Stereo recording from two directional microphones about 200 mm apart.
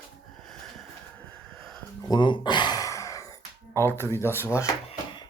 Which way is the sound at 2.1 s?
20° left (ahead or behind).